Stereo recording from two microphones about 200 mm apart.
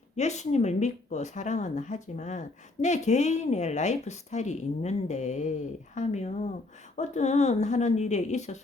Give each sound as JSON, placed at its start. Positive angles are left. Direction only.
{"t": 0.2, "sound": "speech", "side_deg": 35}